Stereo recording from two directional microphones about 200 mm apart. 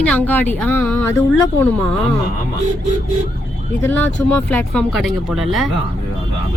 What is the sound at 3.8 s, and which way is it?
Speech, 10° left (ahead or behind).